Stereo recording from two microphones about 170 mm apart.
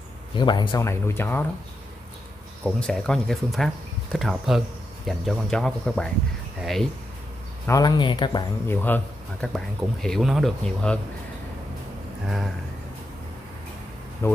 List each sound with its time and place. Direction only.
0.4 s speech: 25° left (ahead or behind)
2.6 s speech: 5° left (ahead or behind)
7.6 s speech: 20° left (ahead or behind)
8.6 s speech: 10° left (ahead or behind)
10.0 s speech: centre (ahead or behind)
14.2 s speech: 15° left (ahead or behind)